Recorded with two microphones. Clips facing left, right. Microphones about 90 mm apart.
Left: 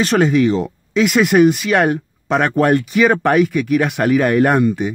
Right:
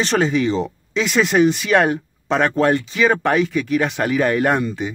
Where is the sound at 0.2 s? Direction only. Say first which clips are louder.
Left 4 dB; 10° left (ahead or behind).